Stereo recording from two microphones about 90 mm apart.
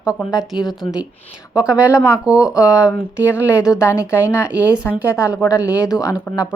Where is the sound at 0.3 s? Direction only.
5° right (ahead or behind).